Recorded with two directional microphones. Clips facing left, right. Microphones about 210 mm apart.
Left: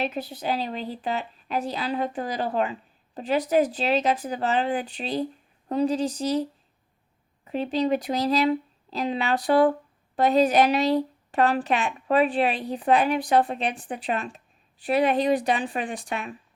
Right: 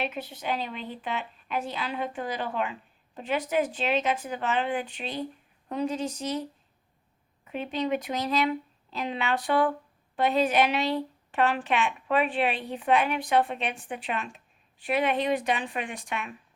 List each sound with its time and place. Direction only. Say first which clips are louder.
0.0 s a woman's voice: left 4 dB; 35° left (ahead or behind)
7.4 s a woman's voice: left 5 dB; 35° left (ahead or behind)